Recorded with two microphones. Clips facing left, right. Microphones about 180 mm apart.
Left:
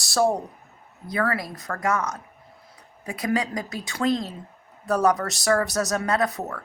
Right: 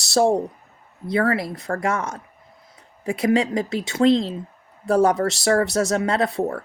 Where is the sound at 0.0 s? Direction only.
25° right (ahead or behind).